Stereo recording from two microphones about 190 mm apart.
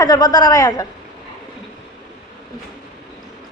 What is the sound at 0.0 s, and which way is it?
Speech, 20° left (ahead or behind).